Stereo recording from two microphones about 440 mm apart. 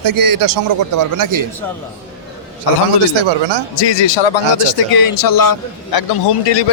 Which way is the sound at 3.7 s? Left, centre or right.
Left.